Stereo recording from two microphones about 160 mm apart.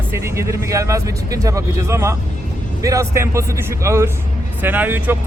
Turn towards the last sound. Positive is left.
turn(degrees=-10)  # may be behind; listen again after turning